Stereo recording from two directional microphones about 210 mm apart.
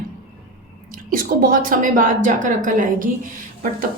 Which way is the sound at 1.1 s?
40° right (ahead or behind).